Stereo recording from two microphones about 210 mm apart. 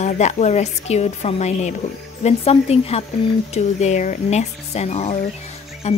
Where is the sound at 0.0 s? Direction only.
35° left (ahead or behind).